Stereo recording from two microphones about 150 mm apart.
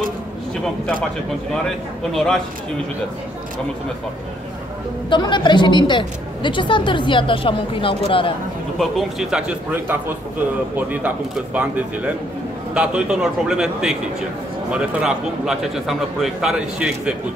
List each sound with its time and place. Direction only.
2.1 s a man's voice: centre (ahead or behind)
5.1 s a woman's voice: 30° left (ahead or behind)
8.7 s a man's voice: centre (ahead or behind)